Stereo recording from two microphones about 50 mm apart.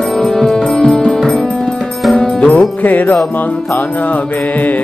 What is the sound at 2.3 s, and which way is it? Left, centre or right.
Music, left.